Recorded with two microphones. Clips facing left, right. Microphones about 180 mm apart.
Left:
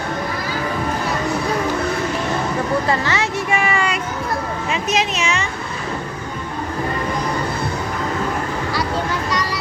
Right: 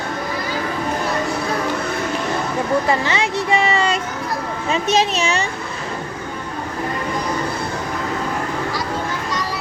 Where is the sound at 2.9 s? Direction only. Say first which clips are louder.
Right 1 dB; 20° right (ahead or behind).